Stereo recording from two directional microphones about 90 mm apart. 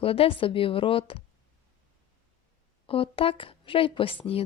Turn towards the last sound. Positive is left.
turn(degrees=80)